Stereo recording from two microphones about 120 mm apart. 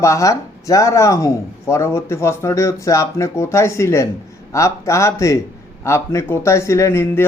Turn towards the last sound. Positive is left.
turn(degrees=20)  # may be behind; listen again after turning